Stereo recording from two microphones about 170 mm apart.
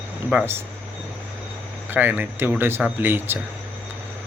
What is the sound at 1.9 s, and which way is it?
Speech, 10° right (ahead or behind).